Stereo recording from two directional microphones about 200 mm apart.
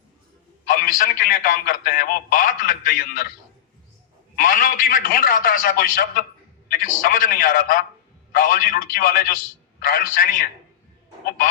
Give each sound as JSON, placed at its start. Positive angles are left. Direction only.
{"t": 0.6, "sound": "a man's voice", "side_deg": 45}
{"t": 4.4, "sound": "a man's voice", "side_deg": 45}